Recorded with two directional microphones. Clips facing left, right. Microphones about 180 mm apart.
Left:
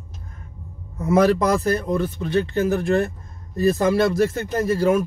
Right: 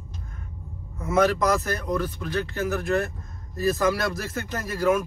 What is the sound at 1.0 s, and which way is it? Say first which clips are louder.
Speech: left 4 dB; 30° left (ahead or behind).